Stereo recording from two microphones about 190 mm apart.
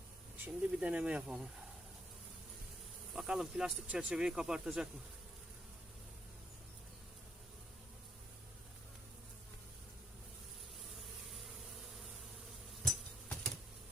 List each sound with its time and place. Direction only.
0.4 s speech: 5° right (ahead or behind)
3.1 s speech: 5° right (ahead or behind)
12.8 s a sound: 5° left (ahead or behind)